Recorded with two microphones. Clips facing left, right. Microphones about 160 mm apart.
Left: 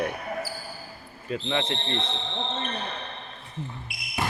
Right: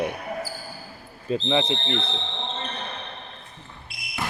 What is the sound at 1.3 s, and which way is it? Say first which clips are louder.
Speech: right 5 dB; 25° right (ahead or behind).